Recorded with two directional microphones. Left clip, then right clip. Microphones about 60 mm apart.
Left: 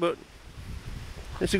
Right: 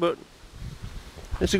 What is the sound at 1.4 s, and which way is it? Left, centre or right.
Speech, right.